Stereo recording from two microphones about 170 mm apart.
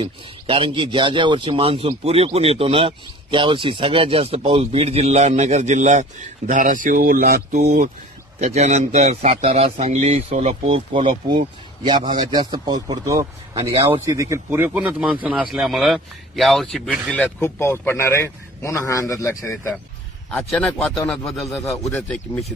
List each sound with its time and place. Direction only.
0.0 s speech: 30° right (ahead or behind); by 7.9 s 55° right (ahead or behind)
8.4 s speech: 40° right (ahead or behind); by 22.4 s 5° left (ahead or behind)